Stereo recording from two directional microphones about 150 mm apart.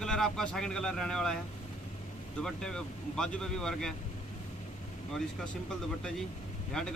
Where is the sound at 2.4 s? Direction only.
5° left (ahead or behind).